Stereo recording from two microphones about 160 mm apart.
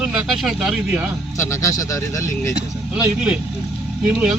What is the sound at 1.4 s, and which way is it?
A man's voice, 20° left (ahead or behind).